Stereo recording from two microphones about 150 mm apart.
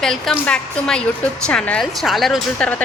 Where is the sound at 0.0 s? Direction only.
5° left (ahead or behind).